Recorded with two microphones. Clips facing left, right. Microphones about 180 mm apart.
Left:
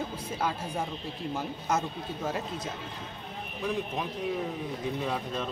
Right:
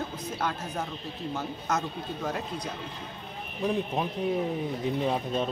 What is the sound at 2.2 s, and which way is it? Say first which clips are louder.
Speech: even; 5° left (ahead or behind).